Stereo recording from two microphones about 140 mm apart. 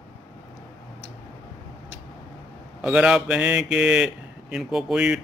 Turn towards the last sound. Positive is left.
turn(degrees=-5)  # may be behind; listen again after turning